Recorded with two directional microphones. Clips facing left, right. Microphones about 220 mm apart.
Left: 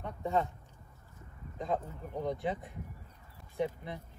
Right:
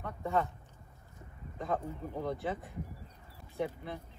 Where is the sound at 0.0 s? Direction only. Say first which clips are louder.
Left 1 dB; 15° left (ahead or behind).